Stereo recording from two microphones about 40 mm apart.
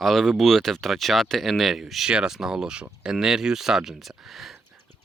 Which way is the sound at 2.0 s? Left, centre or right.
Right.